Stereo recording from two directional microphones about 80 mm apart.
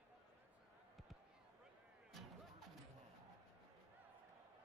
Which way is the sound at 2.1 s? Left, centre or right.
Centre.